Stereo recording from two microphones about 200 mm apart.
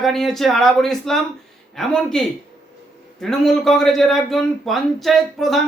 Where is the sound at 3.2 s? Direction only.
Centre (ahead or behind).